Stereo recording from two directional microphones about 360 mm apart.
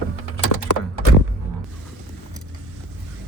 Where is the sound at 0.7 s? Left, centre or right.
Left.